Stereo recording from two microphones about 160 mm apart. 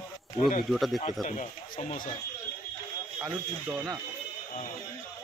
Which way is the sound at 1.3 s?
50° left (ahead or behind).